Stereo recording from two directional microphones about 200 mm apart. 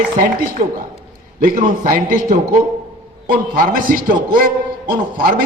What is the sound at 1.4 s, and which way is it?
A man's voice, 40° right (ahead or behind).